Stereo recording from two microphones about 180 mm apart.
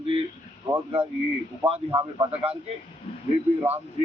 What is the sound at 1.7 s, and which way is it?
Speech, 35° right (ahead or behind).